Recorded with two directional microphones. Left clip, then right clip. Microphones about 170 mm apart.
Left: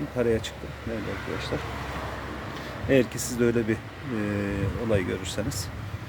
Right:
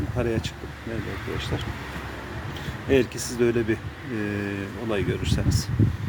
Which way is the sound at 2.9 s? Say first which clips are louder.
Right 1 dB; 20° left (ahead or behind).